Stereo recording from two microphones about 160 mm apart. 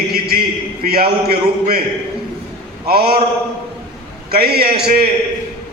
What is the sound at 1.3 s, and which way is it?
Speech, 75° right (ahead or behind).